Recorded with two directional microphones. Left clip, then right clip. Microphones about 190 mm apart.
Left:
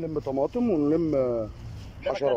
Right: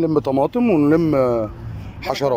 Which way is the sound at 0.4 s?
5° left (ahead or behind).